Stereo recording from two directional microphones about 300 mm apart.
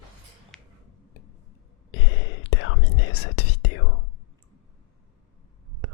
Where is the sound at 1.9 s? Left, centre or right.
Left.